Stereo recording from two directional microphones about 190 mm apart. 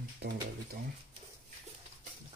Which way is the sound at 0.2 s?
60° right (ahead or behind).